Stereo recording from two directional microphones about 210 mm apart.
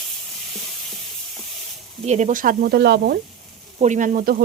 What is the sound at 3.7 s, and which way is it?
Speech, 35° right (ahead or behind).